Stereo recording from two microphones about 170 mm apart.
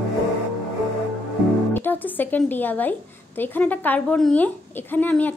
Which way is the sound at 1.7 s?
10° left (ahead or behind).